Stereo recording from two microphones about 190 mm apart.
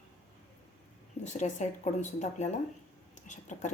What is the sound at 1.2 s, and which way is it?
Speech, 40° left (ahead or behind).